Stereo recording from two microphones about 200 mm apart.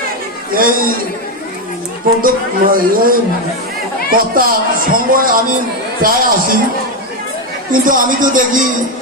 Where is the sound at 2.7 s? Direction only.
45° right (ahead or behind).